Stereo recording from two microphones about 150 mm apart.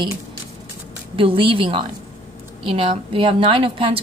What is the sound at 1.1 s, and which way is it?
A woman's voice, 35° right (ahead or behind).